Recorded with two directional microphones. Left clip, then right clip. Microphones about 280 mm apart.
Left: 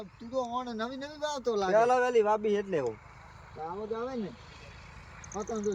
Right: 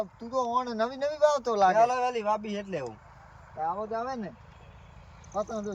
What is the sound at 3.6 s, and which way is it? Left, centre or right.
Speech, centre.